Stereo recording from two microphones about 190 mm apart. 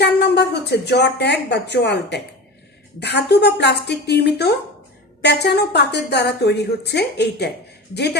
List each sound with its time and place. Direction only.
0.0 s a woman's voice: 60° left (ahead or behind)